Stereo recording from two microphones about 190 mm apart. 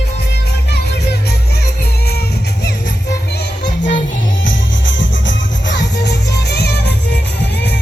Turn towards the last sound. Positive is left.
turn(degrees=65)  # may be behind; listen again after turning